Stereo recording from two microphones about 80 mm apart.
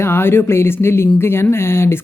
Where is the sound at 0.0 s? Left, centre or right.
Left.